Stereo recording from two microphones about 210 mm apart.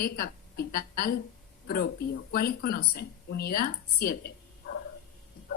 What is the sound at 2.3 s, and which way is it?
A woman's voice, 50° left (ahead or behind).